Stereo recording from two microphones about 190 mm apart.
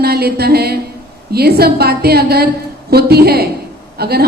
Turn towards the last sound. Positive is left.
turn(degrees=-55)  # may be behind; listen again after turning